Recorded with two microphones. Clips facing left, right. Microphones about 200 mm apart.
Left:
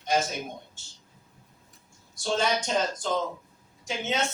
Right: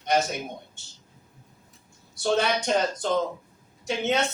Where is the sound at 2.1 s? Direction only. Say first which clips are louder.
Right 3 dB; 65° right (ahead or behind).